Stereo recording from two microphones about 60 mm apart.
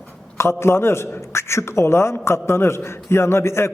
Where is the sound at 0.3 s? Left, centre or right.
Left.